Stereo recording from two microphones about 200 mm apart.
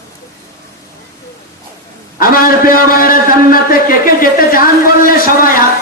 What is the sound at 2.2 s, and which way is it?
A man's voice, 45° left (ahead or behind).